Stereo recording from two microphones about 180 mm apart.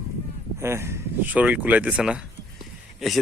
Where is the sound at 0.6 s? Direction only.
15° right (ahead or behind).